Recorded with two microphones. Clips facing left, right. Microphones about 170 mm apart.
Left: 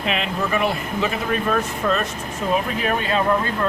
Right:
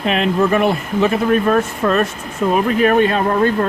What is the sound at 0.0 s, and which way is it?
Speech, 45° right (ahead or behind).